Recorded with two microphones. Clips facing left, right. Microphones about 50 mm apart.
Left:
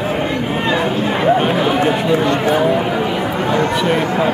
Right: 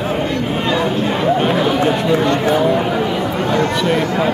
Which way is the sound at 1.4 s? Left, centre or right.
Centre.